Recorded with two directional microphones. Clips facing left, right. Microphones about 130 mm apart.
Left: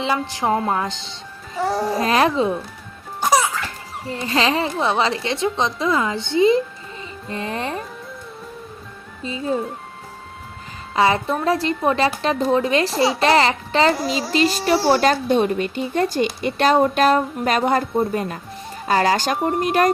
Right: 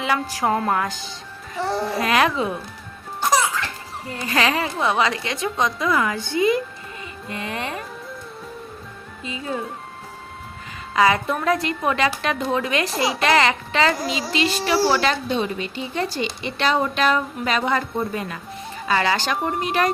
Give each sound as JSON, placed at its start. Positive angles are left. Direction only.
{"t": 0.0, "sound": "a woman's voice", "side_deg": 25}
{"t": 1.5, "sound": "music", "side_deg": 5}
{"t": 2.0, "sound": "a child's voice", "side_deg": 35}
{"t": 3.2, "sound": "music", "side_deg": 10}
{"t": 4.1, "sound": "a woman's voice", "side_deg": 25}
{"t": 9.2, "sound": "a child's voice", "side_deg": 35}
{"t": 10.9, "sound": "a child's voice", "side_deg": 30}